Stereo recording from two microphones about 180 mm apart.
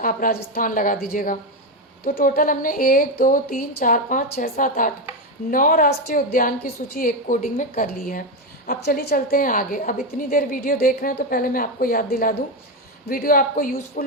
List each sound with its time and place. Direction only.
0.0 s a woman's voice: 55° left (ahead or behind)